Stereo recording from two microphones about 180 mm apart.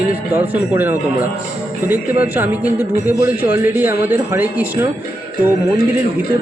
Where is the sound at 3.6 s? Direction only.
10° right (ahead or behind).